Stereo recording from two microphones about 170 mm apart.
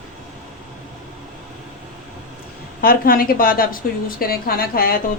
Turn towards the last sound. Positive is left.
turn(degrees=60)  # may be behind; listen again after turning